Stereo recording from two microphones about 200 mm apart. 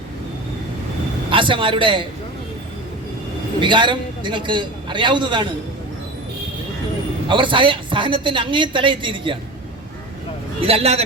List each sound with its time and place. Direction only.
1.3 s a man's voice: 25° right (ahead or behind)
3.6 s speech: 25° right (ahead or behind)
7.3 s speech: 25° right (ahead or behind)
10.6 s a man's voice: 30° right (ahead or behind)